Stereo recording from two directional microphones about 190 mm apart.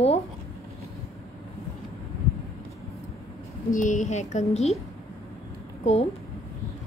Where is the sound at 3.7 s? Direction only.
40° left (ahead or behind).